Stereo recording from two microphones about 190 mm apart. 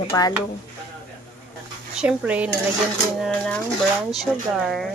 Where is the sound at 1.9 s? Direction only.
5° right (ahead or behind).